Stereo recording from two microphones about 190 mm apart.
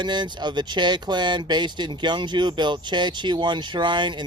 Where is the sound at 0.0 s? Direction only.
25° right (ahead or behind).